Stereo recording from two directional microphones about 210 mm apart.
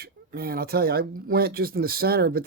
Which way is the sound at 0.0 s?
45° right (ahead or behind).